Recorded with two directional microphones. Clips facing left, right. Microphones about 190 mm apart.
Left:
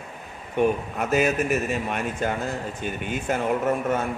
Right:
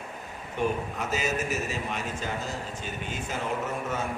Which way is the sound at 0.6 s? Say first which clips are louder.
Left 6 dB; 60° left (ahead or behind).